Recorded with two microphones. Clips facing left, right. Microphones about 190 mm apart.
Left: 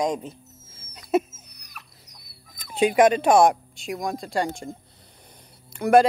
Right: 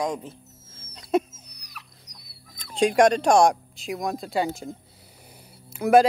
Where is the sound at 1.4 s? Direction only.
50° left (ahead or behind).